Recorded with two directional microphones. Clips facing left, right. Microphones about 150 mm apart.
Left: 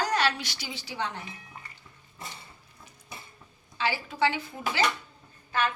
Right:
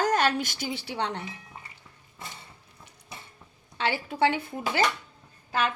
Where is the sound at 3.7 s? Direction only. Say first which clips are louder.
Right 2 dB; 55° right (ahead or behind).